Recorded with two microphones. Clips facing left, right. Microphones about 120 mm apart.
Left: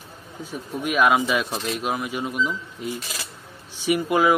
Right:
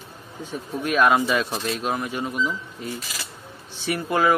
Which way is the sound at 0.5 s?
5° left (ahead or behind).